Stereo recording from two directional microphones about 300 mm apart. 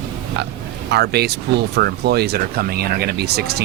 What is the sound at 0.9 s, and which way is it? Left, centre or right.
Speech, right.